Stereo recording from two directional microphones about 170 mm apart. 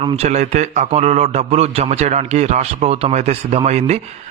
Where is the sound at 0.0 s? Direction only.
40° right (ahead or behind).